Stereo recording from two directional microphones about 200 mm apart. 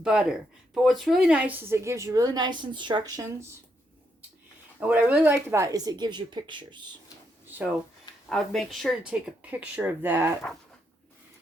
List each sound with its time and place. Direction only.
0.0 s a woman's voice: 5° right (ahead or behind)
4.8 s a woman's voice: 5° right (ahead or behind); by 6.8 s 25° right (ahead or behind)
7.4 s a sound: 10° right (ahead or behind)
8.3 s a woman's voice: centre (ahead or behind)